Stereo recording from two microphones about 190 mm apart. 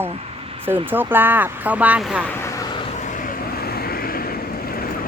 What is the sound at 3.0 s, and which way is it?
Vehicle, 40° left (ahead or behind).